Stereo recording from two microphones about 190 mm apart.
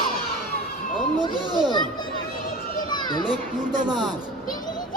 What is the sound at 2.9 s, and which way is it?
Children playing, 25° left (ahead or behind).